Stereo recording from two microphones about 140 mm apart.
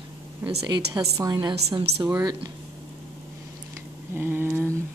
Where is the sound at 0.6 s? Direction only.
30° right (ahead or behind).